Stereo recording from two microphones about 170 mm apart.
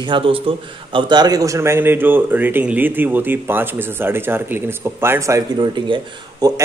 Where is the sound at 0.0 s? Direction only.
30° right (ahead or behind).